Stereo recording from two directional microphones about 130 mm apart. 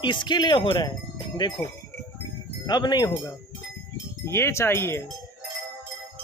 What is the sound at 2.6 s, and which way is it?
Speech, 35° left (ahead or behind).